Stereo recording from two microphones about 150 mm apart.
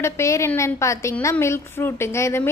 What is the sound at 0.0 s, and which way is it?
A woman's voice, 20° left (ahead or behind).